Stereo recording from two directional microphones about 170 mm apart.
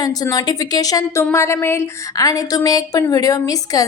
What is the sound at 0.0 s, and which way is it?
A woman's voice, 20° left (ahead or behind).